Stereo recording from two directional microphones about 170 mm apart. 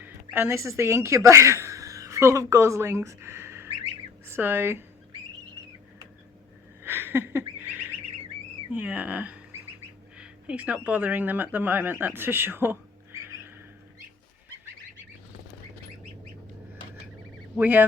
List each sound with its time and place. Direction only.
0.0 s speech: 15° right (ahead or behind)
6.8 s a sound: 15° right (ahead or behind)
8.7 s speech: 10° right (ahead or behind)
17.6 s speech: 10° right (ahead or behind)